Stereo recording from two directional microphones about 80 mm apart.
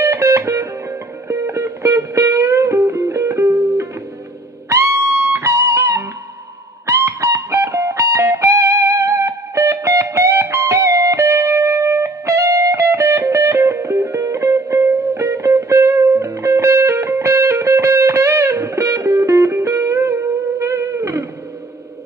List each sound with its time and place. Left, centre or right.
0.0 s music: right